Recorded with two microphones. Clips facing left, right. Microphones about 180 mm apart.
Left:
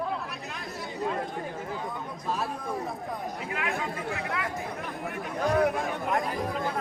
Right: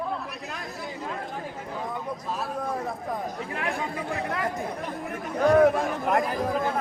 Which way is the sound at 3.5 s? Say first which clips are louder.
Even; 35° right (ahead or behind).